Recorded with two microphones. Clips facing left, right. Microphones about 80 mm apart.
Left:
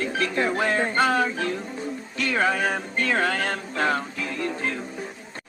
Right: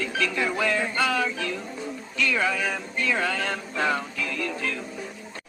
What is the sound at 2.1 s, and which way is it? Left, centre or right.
Music, left.